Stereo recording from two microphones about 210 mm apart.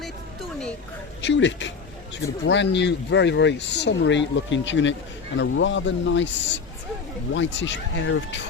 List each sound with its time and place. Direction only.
1.2 s speech: 60° left (ahead or behind)
7.3 s speech: 60° left (ahead or behind)